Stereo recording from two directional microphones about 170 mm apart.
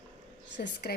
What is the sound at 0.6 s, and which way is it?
Speech, 65° left (ahead or behind).